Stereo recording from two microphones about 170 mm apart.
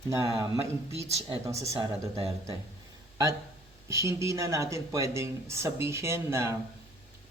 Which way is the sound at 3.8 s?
15° right (ahead or behind).